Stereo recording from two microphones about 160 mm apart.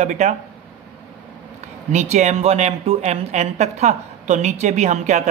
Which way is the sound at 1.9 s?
45° right (ahead or behind).